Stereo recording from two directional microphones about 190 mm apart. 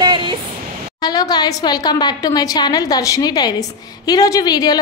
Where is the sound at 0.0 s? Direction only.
25° right (ahead or behind).